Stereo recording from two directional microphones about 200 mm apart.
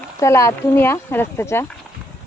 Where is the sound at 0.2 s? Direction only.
15° left (ahead or behind).